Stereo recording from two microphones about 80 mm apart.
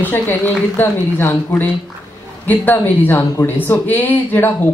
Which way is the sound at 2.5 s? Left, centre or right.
Left.